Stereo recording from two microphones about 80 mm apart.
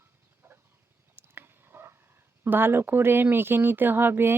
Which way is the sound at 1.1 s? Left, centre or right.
Right.